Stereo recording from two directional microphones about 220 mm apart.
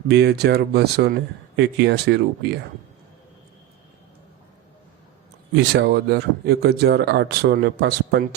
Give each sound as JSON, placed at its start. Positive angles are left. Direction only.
{"t": 0.1, "sound": "speech", "side_deg": -50}
{"t": 5.5, "sound": "speech", "side_deg": -50}